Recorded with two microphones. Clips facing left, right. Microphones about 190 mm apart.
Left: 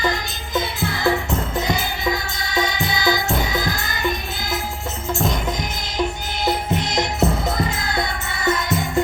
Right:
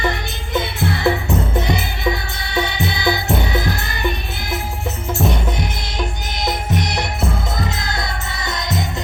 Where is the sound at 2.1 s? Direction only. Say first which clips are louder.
Right 1 dB; 60° right (ahead or behind).